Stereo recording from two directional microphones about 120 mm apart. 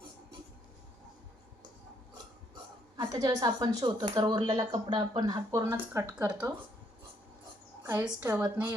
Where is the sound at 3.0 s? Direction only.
35° right (ahead or behind).